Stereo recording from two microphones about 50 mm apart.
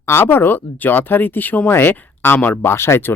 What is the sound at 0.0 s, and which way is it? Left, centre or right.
Speech, left.